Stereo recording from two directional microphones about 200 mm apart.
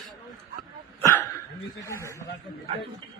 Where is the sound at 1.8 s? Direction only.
15° left (ahead or behind).